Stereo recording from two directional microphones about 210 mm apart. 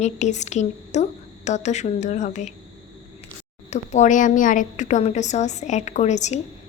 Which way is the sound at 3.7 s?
35° left (ahead or behind).